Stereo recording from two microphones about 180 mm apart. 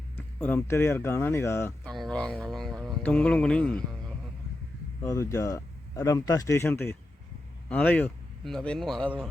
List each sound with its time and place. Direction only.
0.2 s speech: 10° left (ahead or behind)
5.0 s speech: 15° left (ahead or behind)